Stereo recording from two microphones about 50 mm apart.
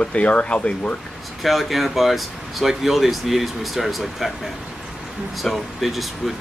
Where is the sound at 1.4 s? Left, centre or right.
Centre.